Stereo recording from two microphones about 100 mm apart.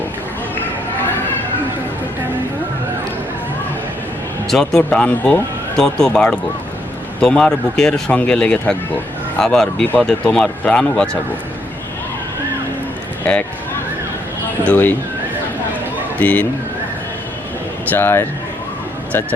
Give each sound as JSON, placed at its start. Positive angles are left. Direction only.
{"t": 4.4, "sound": "a man's voice", "side_deg": 5}
{"t": 13.2, "sound": "speech", "side_deg": 15}
{"t": 14.7, "sound": "speech", "side_deg": 20}
{"t": 16.1, "sound": "speech", "side_deg": 15}
{"t": 17.9, "sound": "speech", "side_deg": 25}